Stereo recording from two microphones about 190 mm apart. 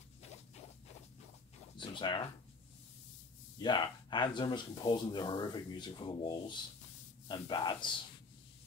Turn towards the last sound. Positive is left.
turn(degrees=25)  # may be behind; listen again after turning